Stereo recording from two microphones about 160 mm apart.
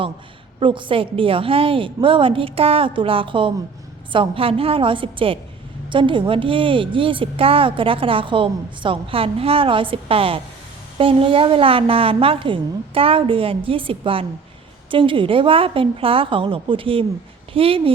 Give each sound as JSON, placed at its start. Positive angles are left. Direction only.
{"t": 0.6, "sound": "a woman's voice", "side_deg": -30}